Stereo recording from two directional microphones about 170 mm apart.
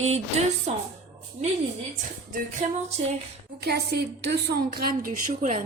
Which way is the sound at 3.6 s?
70° right (ahead or behind).